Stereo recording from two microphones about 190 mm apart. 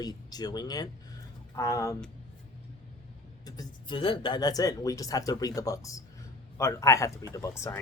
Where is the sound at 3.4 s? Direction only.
20° left (ahead or behind).